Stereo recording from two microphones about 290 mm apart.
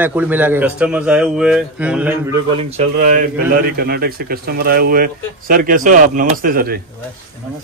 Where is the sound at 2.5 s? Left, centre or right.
Right.